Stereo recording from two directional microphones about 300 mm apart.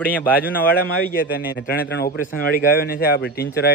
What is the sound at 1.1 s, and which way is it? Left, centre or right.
A man's voice, left.